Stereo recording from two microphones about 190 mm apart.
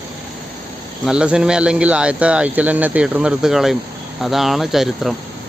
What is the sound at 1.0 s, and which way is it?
Speech, 5° right (ahead or behind).